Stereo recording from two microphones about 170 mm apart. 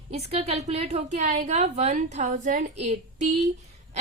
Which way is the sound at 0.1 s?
40° right (ahead or behind).